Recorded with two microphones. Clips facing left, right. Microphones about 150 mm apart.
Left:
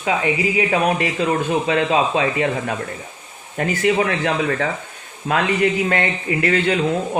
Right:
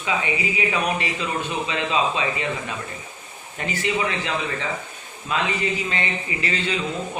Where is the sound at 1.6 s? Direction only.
50° left (ahead or behind).